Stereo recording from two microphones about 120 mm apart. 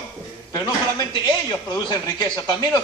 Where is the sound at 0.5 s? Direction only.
30° left (ahead or behind).